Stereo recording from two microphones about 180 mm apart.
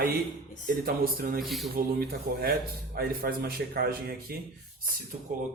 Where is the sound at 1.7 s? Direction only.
55° right (ahead or behind).